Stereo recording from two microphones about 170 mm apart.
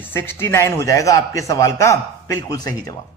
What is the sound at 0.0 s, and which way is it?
A man's voice, 15° left (ahead or behind).